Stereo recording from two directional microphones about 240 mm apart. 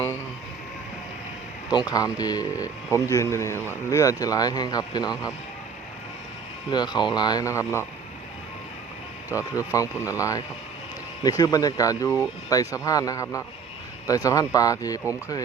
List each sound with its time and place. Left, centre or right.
1.7 s speech: centre
6.7 s speech: centre
10.0 s speech: centre